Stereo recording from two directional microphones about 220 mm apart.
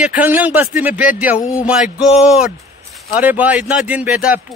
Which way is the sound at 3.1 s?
5° right (ahead or behind).